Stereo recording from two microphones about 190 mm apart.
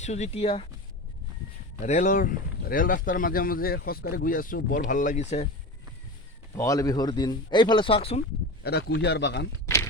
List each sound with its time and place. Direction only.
0.0 s speech: 35° left (ahead or behind)
1.8 s speech: 40° left (ahead or behind)
6.6 s speech: 20° left (ahead or behind)
8.6 s a man's voice: 60° left (ahead or behind)